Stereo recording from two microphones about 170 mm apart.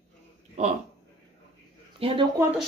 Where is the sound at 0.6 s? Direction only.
40° right (ahead or behind).